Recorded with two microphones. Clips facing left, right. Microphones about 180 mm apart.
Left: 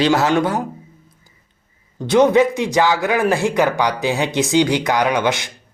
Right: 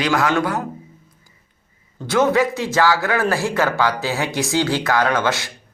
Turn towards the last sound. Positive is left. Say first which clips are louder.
# left 2 dB
turn(degrees=20)  # may be behind; listen again after turning